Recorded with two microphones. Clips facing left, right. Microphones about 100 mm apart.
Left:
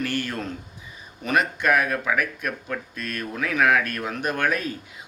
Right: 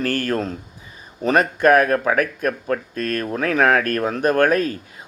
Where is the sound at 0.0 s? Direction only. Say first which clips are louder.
Right 6 dB; 40° right (ahead or behind).